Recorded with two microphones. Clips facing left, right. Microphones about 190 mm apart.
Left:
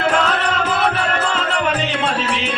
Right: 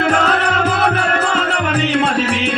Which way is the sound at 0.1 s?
45° right (ahead or behind).